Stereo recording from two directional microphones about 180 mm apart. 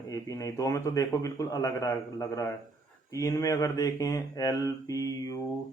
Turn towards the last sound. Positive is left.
turn(degrees=20)  # may be behind; listen again after turning